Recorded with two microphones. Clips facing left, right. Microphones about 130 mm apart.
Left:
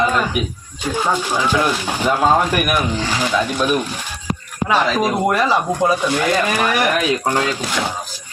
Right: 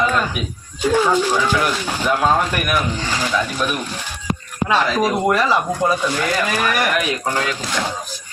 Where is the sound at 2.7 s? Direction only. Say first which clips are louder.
Left 2 dB; 10° left (ahead or behind).